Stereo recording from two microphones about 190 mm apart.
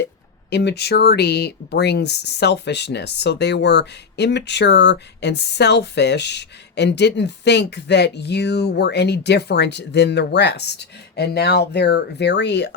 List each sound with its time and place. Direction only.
0.5 s speech: 60° left (ahead or behind)